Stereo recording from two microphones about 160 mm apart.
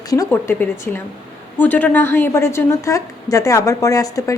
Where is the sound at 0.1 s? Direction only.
20° left (ahead or behind).